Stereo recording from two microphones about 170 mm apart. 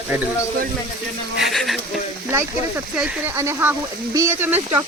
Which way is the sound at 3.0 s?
10° right (ahead or behind).